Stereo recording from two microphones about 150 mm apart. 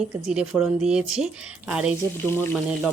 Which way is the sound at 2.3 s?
15° left (ahead or behind).